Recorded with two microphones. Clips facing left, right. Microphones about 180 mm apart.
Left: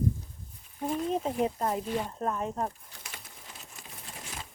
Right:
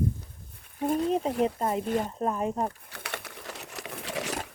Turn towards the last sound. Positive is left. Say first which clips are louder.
# right 11 dB
turn(degrees=-75)  # may be behind; listen again after turning